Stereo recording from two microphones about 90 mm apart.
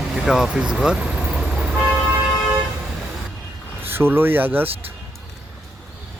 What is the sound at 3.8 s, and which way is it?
Speech, 25° right (ahead or behind).